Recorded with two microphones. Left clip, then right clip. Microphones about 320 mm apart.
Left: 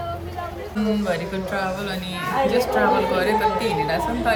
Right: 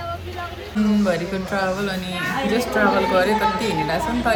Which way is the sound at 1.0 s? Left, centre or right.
Centre.